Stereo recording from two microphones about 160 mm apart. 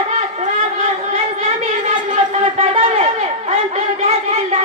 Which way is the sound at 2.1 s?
45° right (ahead or behind).